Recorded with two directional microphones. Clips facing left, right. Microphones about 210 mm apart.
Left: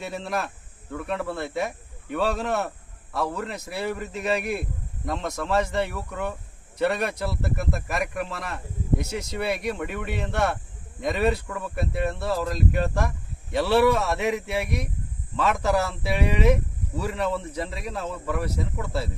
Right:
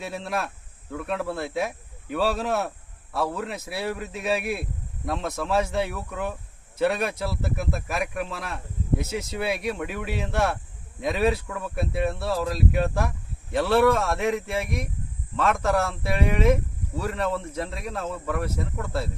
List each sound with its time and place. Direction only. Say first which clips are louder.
0.0 s speech: even; centre (ahead or behind)